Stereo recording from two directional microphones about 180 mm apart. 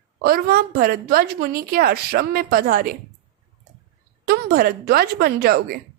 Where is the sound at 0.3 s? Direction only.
55° right (ahead or behind).